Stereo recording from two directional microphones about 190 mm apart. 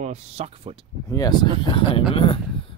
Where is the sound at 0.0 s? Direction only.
35° right (ahead or behind).